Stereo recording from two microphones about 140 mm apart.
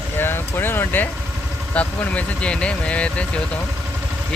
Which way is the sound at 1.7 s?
10° left (ahead or behind).